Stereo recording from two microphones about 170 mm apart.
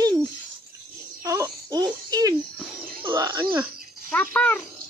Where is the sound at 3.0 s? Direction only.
25° right (ahead or behind).